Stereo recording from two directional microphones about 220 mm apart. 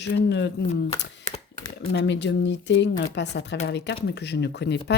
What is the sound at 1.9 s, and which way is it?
Speech, 55° left (ahead or behind).